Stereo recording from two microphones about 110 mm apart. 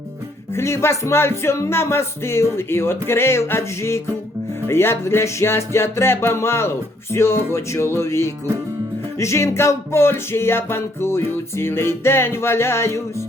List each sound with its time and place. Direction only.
0.5 s music: 25° left (ahead or behind)